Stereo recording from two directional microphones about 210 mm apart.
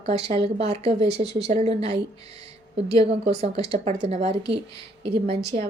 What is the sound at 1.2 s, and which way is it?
Speech, 55° right (ahead or behind).